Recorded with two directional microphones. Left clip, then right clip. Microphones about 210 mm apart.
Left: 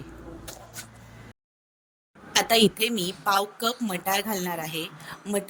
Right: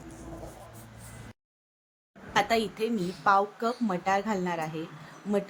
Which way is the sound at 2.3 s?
50° left (ahead or behind).